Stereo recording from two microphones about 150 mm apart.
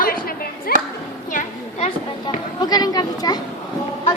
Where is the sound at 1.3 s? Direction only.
55° left (ahead or behind).